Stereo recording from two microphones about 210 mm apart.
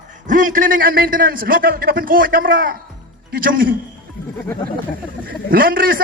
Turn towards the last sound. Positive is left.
turn(degrees=-45)  # may be behind; listen again after turning